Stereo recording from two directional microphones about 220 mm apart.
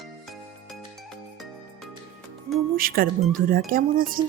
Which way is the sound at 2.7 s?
40° right (ahead or behind).